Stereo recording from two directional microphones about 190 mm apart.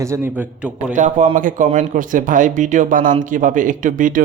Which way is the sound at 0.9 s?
40° right (ahead or behind).